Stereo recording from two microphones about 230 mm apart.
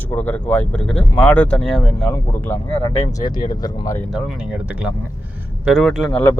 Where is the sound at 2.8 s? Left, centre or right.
Centre.